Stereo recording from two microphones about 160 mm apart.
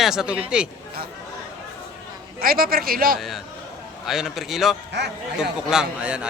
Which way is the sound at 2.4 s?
65° right (ahead or behind).